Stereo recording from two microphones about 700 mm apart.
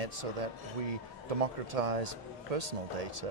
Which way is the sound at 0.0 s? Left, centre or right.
Right.